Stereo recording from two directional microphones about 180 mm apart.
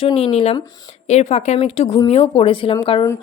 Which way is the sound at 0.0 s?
30° left (ahead or behind).